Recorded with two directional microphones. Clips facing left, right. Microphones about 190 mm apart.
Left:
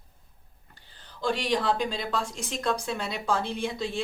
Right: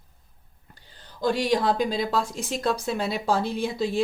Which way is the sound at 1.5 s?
40° right (ahead or behind).